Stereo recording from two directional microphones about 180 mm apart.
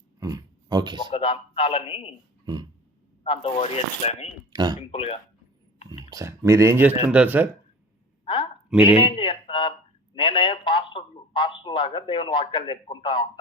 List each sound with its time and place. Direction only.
0.2 s speech: 20° right (ahead or behind)
1.1 s speech: 30° left (ahead or behind)
3.2 s speech: 35° left (ahead or behind)
4.5 s speech: 20° right (ahead or behind)
4.9 s speech: 30° left (ahead or behind)
5.9 s speech: 20° right (ahead or behind)
8.2 s a sound: 25° left (ahead or behind)
8.7 s speech: 5° right (ahead or behind)
9.0 s a man's voice: 30° left (ahead or behind)